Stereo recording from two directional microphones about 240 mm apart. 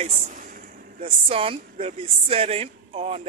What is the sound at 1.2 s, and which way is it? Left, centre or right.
A man's voice, right.